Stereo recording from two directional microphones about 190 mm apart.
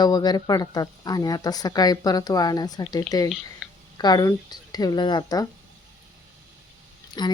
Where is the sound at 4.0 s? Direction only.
20° left (ahead or behind).